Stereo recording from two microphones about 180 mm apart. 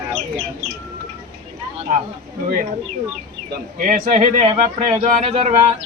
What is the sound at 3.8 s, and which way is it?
A man's voice, 45° right (ahead or behind).